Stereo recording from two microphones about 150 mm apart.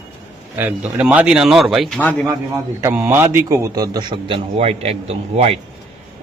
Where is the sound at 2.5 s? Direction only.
20° right (ahead or behind).